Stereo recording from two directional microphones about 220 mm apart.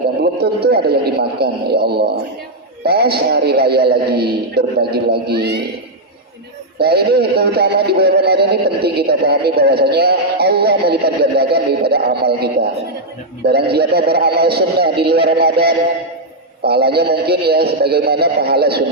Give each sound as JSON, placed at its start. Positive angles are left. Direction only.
{"t": 0.3, "sound": "music", "side_deg": -45}
{"t": 6.7, "sound": "music", "side_deg": -45}